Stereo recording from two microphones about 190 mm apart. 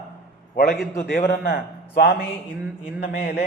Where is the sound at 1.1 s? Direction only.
60° left (ahead or behind).